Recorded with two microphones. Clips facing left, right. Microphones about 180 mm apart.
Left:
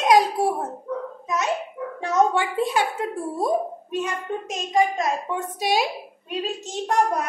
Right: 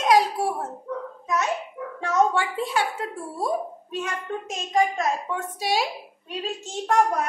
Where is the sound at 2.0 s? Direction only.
20° left (ahead or behind).